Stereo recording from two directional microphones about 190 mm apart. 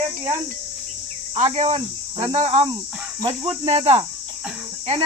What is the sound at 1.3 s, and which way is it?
Speech, 35° right (ahead or behind).